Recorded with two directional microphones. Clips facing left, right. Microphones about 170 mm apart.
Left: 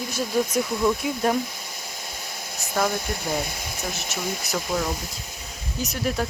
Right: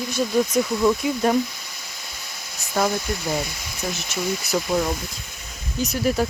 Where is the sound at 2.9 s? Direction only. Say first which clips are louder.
Right 2 dB; 55° left (ahead or behind).